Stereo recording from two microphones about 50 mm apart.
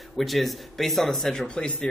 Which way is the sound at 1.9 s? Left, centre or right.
Centre.